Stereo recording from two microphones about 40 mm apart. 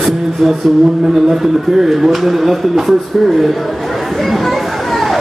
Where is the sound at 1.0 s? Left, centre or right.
Centre.